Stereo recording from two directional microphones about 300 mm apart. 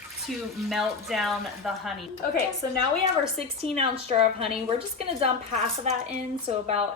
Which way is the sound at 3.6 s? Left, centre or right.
Centre.